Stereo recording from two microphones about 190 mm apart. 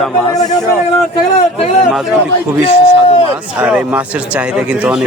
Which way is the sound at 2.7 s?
30° left (ahead or behind).